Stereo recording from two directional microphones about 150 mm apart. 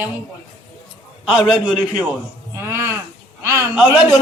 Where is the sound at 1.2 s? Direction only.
5° right (ahead or behind).